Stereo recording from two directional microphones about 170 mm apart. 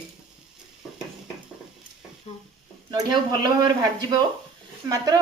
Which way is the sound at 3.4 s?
25° right (ahead or behind).